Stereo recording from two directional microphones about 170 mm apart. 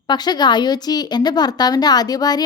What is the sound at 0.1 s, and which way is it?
Speech, 25° left (ahead or behind).